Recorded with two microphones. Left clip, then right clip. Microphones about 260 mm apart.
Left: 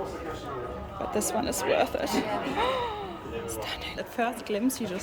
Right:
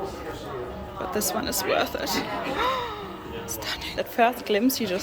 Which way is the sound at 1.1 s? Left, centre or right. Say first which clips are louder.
Right 1 dB; centre.